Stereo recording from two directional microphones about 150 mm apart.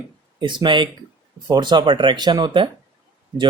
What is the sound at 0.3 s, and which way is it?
Speech, 30° right (ahead or behind).